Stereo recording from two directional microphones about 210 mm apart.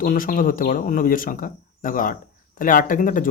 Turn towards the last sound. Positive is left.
turn(degrees=40)  # may be behind; listen again after turning